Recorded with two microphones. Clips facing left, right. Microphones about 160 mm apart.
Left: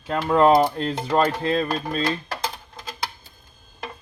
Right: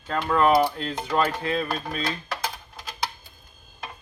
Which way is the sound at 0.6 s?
40° left (ahead or behind).